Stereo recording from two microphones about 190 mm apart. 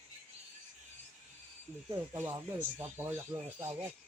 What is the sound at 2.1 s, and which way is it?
Speech, 10° right (ahead or behind).